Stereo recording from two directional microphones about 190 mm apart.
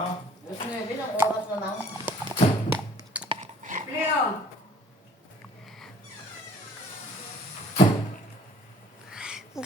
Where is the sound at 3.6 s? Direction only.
40° right (ahead or behind).